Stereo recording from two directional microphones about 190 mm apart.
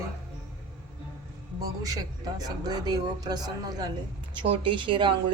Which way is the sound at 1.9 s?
20° right (ahead or behind).